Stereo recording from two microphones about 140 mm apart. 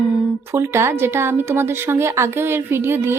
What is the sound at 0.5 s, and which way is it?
A woman's voice, 20° right (ahead or behind).